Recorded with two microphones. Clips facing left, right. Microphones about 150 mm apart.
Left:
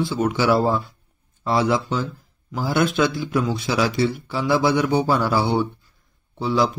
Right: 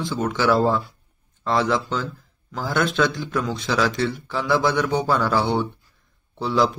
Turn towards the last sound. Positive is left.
turn(degrees=0)  # may be behind; listen again after turning